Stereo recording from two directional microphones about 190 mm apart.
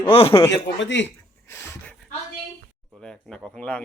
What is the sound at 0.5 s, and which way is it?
Speech, 75° left (ahead or behind).